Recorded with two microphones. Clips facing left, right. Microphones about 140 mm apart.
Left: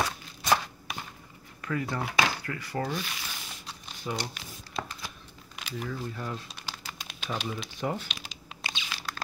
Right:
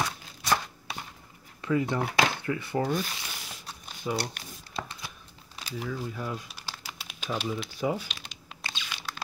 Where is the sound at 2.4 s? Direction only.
20° right (ahead or behind).